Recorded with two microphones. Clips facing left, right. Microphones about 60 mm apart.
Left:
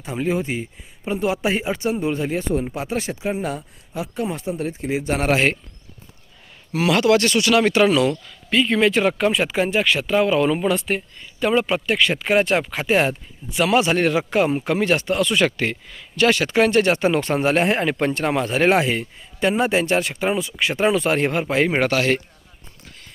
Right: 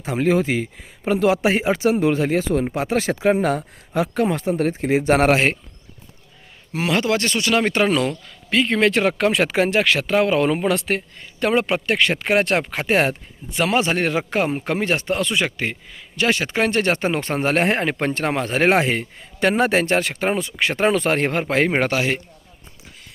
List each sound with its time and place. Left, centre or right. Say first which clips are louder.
0.0 s speech: right 4 dB; right
0.5 s speech: right 4 dB; right
1.7 s speech: right 5 dB; right
2.0 s speech: right 4 dB; right
2.8 s speech: right 6 dB; right
4.7 s speech: right 7 dB; right
6.7 s speech: left 4 dB; right
8.4 s speech: even; right
9.1 s speech: right 1 dB; right
10.2 s speech: even; right
10.8 s speech: right 1 dB; right
19.4 s speech: right 1 dB; right
21.8 s speech: left 1 dB; right